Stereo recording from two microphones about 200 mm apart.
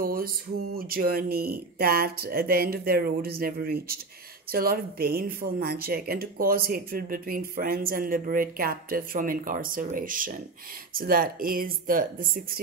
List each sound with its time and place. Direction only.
0.0 s music: 45° right (ahead or behind)
0.7 s speech: 50° right (ahead or behind)